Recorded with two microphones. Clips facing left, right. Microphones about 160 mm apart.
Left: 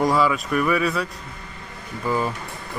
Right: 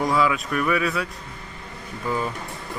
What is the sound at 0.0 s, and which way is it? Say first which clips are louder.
Speech: left 2 dB; centre (ahead or behind).